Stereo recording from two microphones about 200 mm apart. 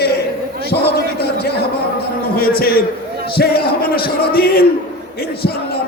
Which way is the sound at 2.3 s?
50° left (ahead or behind).